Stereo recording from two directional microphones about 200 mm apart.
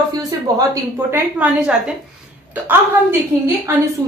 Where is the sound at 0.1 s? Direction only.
20° right (ahead or behind).